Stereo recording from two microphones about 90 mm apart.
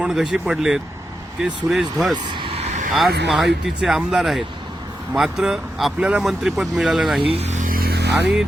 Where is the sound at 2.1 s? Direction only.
60° right (ahead or behind).